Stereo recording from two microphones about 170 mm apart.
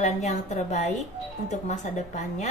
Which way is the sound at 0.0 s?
45° left (ahead or behind).